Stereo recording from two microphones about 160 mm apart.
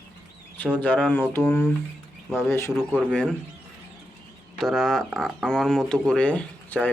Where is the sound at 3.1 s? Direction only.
5° left (ahead or behind).